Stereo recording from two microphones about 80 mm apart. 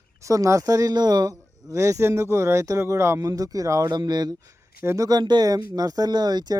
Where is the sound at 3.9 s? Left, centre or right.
Right.